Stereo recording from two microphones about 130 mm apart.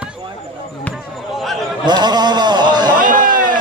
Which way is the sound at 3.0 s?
90° right.